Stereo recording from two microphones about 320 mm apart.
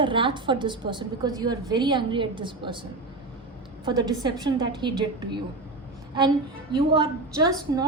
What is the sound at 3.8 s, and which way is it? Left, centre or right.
A woman's voice, centre.